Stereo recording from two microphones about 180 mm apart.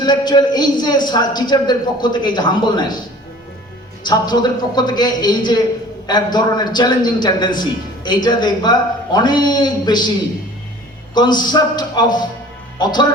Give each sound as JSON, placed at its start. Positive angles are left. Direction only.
{"t": 0.0, "sound": "a man's voice", "side_deg": 25}
{"t": 4.0, "sound": "a man's voice", "side_deg": 25}
{"t": 11.1, "sound": "a man's voice", "side_deg": 25}